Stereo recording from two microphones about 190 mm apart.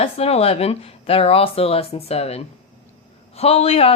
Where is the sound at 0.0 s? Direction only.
30° left (ahead or behind).